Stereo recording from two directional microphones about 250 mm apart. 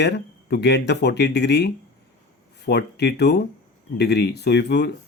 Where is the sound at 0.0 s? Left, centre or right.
Left.